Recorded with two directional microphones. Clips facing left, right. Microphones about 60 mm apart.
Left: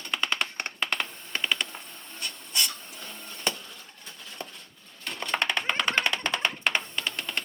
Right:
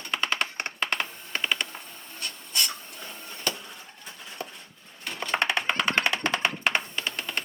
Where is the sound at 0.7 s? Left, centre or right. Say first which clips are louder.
Right 1 dB; centre.